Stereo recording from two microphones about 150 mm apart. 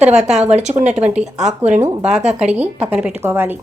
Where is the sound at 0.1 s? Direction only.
50° right (ahead or behind).